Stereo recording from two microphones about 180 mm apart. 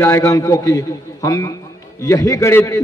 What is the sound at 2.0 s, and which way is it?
Speech, 20° left (ahead or behind).